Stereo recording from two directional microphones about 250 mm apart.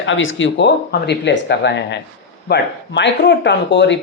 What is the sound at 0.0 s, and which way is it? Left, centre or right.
A woman's voice, left.